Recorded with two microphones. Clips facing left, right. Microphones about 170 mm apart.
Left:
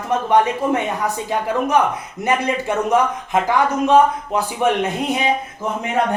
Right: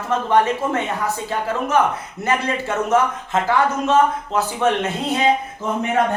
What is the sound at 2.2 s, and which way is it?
A man's voice, 15° left (ahead or behind).